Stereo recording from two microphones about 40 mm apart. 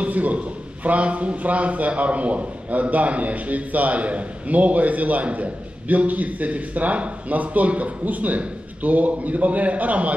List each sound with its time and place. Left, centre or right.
0.0 s a man's voice: right